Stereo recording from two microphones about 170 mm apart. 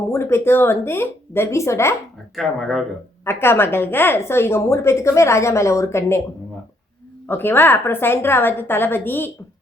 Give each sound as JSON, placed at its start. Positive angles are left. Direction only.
{"t": 0.1, "sound": "a woman's voice", "side_deg": 15}
{"t": 2.3, "sound": "speech", "side_deg": 0}
{"t": 3.2, "sound": "a woman's voice", "side_deg": 15}
{"t": 7.3, "sound": "a woman's voice", "side_deg": 10}